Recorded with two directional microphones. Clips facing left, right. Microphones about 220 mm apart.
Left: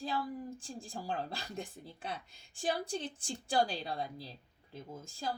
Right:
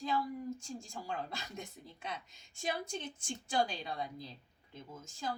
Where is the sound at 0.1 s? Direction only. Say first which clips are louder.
Right 5 dB; 30° left (ahead or behind).